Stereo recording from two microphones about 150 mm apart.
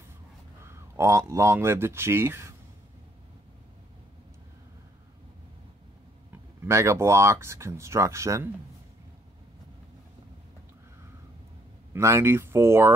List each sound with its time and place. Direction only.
0.7 s speech: 20° right (ahead or behind)
6.6 s speech: 20° right (ahead or behind)
11.9 s speech: 20° right (ahead or behind)